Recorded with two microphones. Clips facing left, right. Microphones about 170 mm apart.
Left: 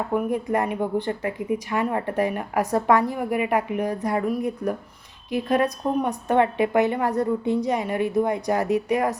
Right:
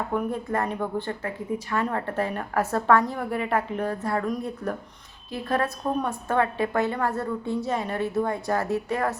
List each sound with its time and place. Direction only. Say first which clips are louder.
0.1 s a woman's voice: left 6 dB; 10° left (ahead or behind)